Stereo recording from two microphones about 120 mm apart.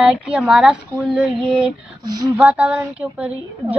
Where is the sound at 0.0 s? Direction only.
5° right (ahead or behind).